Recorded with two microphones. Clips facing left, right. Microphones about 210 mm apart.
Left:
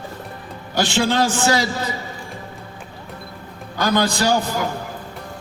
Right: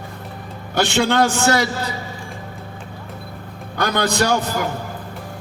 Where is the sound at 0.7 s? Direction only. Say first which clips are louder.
Right 2 dB; 60° right (ahead or behind).